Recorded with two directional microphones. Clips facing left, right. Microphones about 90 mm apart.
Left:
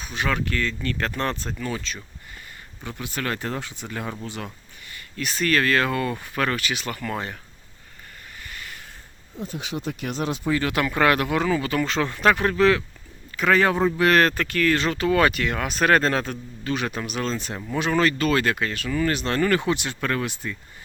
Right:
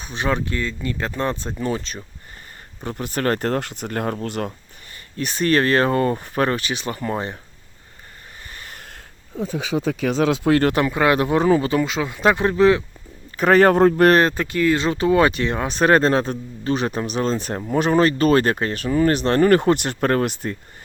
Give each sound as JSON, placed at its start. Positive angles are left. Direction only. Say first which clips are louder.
{"t": 0.0, "sound": "speech", "louder": "right 3 dB", "side_deg": -30}
{"t": 1.5, "sound": "speech", "louder": "right 5 dB", "side_deg": -30}
{"t": 2.8, "sound": "speech", "louder": "right 7 dB", "side_deg": -50}
{"t": 4.9, "sound": "speech", "louder": "right 3 dB", "side_deg": -35}
{"t": 8.4, "sound": "a sound", "louder": "even", "side_deg": -35}
{"t": 10.2, "sound": "speech", "louder": "right 6 dB", "side_deg": -70}
{"t": 10.9, "sound": "speech", "louder": "right 3 dB", "side_deg": -20}
{"t": 11.8, "sound": "speech", "louder": "right 2 dB", "side_deg": -10}
{"t": 13.3, "sound": "speech", "louder": "right 6 dB", "side_deg": -45}
{"t": 14.1, "sound": "speech", "louder": "right 3 dB", "side_deg": -20}